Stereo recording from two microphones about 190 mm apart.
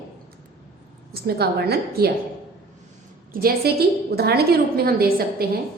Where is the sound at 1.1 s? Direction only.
55° right (ahead or behind).